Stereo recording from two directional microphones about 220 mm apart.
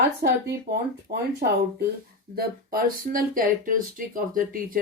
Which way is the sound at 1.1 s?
45° right (ahead or behind).